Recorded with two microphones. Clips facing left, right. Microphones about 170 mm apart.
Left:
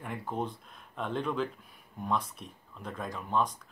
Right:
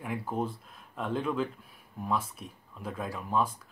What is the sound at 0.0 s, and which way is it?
Speech, 5° right (ahead or behind).